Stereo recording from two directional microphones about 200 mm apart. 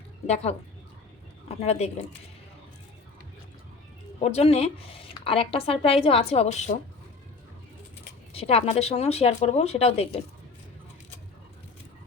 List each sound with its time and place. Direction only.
1.6 s speech: 30° left (ahead or behind)
4.2 s speech: 30° left (ahead or behind)
8.3 s speech: 30° left (ahead or behind)